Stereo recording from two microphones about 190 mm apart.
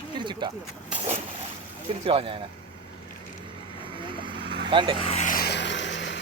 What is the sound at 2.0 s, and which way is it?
Speech, 30° right (ahead or behind).